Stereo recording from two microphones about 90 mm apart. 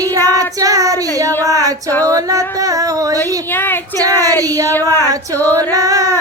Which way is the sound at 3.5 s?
25° left (ahead or behind).